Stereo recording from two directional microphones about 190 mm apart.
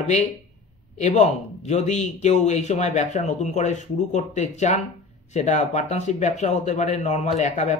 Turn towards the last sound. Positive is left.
turn(degrees=40)  # may be behind; listen again after turning